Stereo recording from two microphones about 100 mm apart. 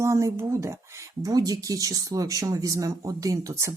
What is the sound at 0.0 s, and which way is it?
Speech, 30° right (ahead or behind).